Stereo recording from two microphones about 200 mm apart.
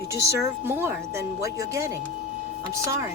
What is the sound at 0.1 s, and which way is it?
Speech, 15° right (ahead or behind).